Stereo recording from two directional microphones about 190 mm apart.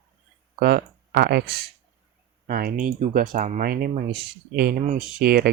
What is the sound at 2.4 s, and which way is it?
Speech, 50° right (ahead or behind).